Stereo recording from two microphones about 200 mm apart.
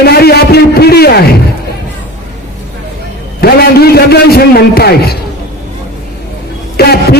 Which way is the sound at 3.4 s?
50° left (ahead or behind).